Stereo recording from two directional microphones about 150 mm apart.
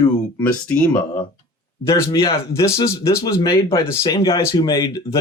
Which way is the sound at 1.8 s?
20° left (ahead or behind).